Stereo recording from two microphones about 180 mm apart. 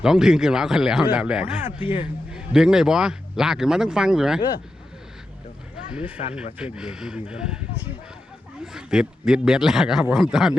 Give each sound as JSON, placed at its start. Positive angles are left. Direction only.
{"t": 0.0, "sound": "speech", "side_deg": -5}
{"t": 1.8, "sound": "speech", "side_deg": 30}
{"t": 2.3, "sound": "speech", "side_deg": -5}
{"t": 6.2, "sound": "speech", "side_deg": 40}
{"t": 6.7, "sound": "speech", "side_deg": -5}
{"t": 8.6, "sound": "speech", "side_deg": -5}